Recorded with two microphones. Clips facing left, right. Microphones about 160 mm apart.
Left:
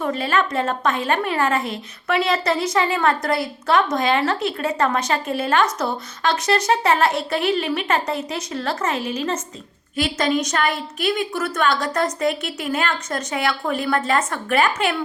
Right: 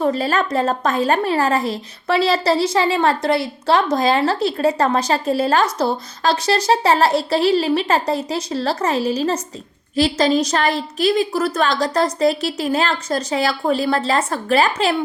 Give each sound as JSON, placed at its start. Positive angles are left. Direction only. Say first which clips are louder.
{"t": 0.0, "sound": "a woman's voice", "louder": "right 3 dB", "side_deg": -35}